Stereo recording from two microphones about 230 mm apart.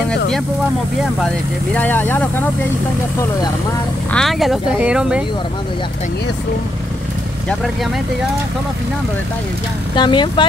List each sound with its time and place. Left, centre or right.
1.2 s speech: centre
4.1 s speech: centre
9.9 s speech: centre